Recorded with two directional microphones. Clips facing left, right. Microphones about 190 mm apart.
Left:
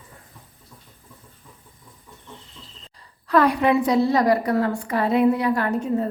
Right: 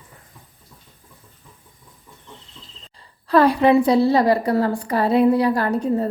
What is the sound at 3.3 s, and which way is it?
A woman's voice, 30° right (ahead or behind).